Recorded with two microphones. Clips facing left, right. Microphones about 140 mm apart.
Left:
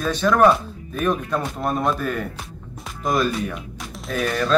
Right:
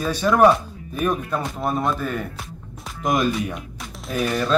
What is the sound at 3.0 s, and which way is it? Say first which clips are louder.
Speech: even; 15° right (ahead or behind).